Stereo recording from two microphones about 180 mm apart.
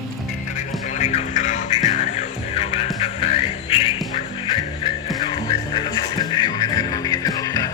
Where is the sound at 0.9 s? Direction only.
40° left (ahead or behind).